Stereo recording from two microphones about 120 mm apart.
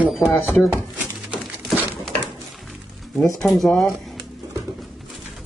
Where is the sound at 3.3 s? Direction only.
Centre (ahead or behind).